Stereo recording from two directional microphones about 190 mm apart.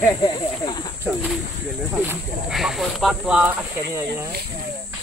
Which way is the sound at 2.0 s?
Centre (ahead or behind).